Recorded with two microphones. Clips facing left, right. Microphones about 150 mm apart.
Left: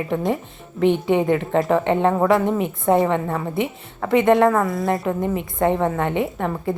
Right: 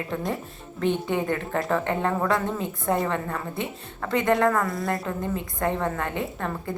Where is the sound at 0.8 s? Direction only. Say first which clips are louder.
Left 6 dB; 85° left.